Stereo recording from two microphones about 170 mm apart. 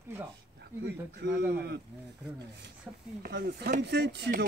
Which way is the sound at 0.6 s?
75° right (ahead or behind).